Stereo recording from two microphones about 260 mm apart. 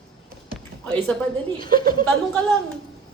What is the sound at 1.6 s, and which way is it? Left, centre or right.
Speech, centre.